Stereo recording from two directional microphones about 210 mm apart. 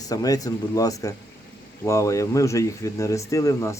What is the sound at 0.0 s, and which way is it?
Speech, 15° left (ahead or behind).